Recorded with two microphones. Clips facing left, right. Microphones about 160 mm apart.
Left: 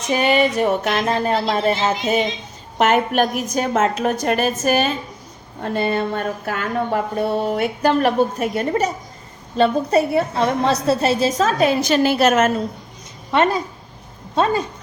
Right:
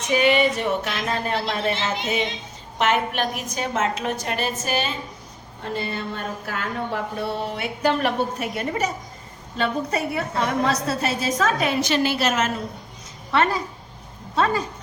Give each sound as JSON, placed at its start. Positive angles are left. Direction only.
{"t": 0.1, "sound": "a woman's voice", "side_deg": 40}
{"t": 13.3, "sound": "speech", "side_deg": 20}